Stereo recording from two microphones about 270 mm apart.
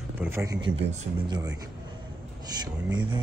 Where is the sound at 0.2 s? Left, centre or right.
Centre.